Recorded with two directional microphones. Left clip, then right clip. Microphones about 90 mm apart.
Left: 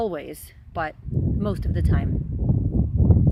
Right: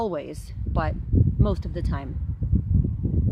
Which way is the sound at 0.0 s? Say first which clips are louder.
Left 1 dB; 20° right (ahead or behind).